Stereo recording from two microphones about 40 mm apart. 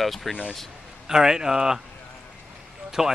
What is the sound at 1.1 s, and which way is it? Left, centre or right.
Speech, centre.